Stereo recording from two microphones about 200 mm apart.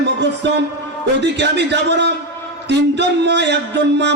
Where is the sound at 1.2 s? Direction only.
60° right (ahead or behind).